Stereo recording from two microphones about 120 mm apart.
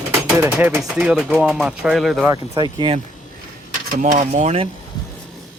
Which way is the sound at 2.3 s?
30° right (ahead or behind).